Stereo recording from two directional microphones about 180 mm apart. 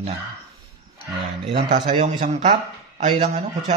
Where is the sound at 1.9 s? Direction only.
30° right (ahead or behind).